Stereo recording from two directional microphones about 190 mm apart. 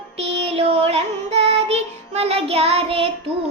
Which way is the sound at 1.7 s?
35° right (ahead or behind).